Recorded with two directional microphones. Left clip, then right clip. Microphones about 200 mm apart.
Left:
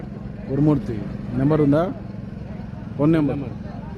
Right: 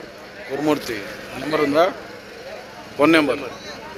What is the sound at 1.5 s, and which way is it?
Speech, 5° left (ahead or behind).